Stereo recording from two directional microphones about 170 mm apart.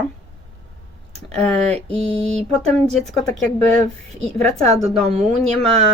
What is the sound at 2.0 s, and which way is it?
Speech, 5° left (ahead or behind).